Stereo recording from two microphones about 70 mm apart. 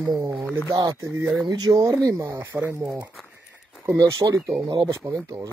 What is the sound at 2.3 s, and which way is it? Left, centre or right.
Speech, right.